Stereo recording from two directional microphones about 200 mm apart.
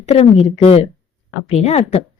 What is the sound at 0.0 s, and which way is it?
Speech, 30° left (ahead or behind).